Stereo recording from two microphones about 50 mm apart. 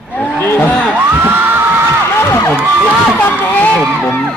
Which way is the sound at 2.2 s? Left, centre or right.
Left.